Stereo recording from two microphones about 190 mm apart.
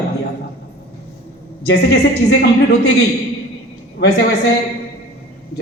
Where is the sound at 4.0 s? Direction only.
65° left (ahead or behind).